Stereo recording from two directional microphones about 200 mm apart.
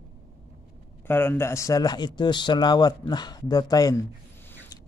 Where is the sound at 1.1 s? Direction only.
10° left (ahead or behind).